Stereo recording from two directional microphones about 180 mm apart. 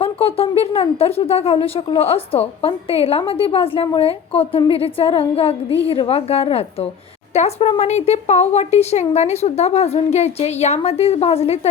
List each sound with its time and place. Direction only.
0.0 s speech: 30° left (ahead or behind)